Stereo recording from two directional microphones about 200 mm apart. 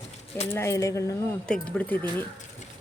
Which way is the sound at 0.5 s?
15° left (ahead or behind).